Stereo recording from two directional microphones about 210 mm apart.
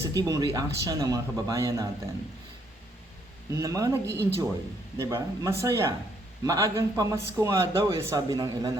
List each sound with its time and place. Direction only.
0.1 s a man's voice: 20° right (ahead or behind)
3.5 s a man's voice: 15° right (ahead or behind)